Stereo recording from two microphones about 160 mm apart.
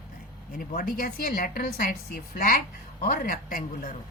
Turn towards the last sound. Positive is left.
turn(degrees=60)  # may be behind; listen again after turning